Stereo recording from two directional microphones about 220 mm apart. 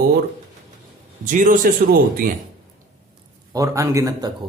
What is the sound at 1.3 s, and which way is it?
Speech, 35° right (ahead or behind).